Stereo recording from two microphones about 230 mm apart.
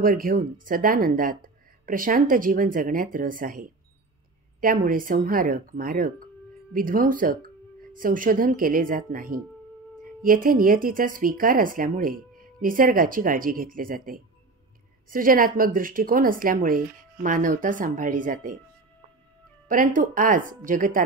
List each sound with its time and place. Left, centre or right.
0.0 s speech: right
19.7 s speech: right